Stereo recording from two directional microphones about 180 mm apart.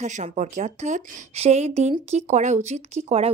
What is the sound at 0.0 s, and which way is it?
A woman's voice, 40° right (ahead or behind).